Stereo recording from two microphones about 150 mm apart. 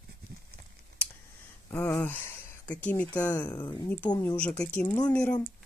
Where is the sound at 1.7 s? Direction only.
15° left (ahead or behind).